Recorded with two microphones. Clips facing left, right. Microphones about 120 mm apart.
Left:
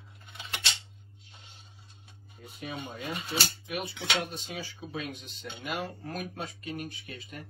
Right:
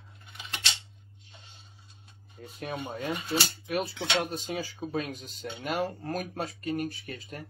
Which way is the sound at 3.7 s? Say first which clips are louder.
Right 4 dB; 40° right (ahead or behind).